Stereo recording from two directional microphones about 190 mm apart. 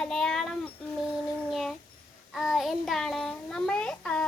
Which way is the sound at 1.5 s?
Centre (ahead or behind).